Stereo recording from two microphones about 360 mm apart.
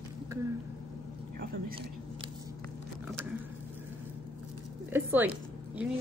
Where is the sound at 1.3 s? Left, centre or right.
Right.